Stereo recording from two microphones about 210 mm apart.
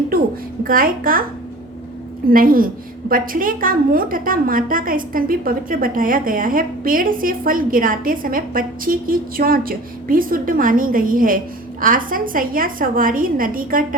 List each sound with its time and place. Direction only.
0.6 s a woman's voice: 40° right (ahead or behind)
2.3 s a woman's voice: 45° right (ahead or behind)